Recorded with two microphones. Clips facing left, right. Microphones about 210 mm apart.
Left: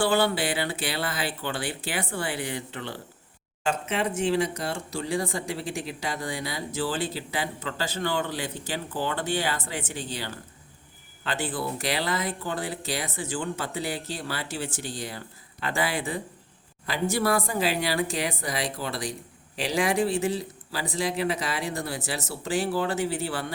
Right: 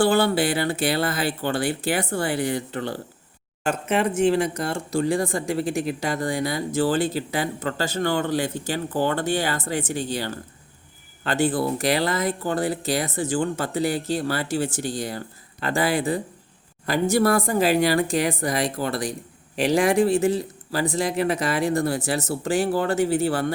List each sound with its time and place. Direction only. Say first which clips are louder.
0.0 s speech: right 5 dB; 45° right (ahead or behind)